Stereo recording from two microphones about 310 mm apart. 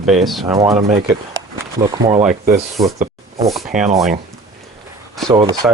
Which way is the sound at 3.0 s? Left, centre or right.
Centre.